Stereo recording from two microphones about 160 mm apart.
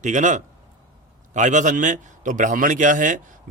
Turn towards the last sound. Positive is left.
turn(degrees=-55)  # may be behind; listen again after turning